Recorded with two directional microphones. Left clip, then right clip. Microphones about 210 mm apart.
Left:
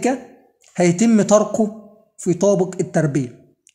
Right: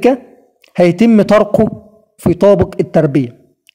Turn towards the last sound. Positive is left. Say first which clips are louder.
# right 8 dB
turn(degrees=-35)  # may be behind; listen again after turning